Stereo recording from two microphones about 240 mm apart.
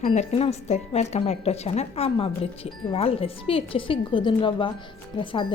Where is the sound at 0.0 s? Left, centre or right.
Left.